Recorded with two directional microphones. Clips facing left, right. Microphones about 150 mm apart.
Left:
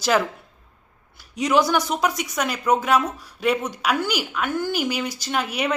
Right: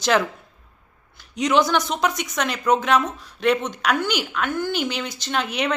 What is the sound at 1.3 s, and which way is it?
Speech, 5° left (ahead or behind).